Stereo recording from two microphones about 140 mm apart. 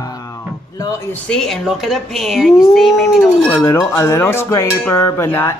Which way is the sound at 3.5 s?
20° left (ahead or behind).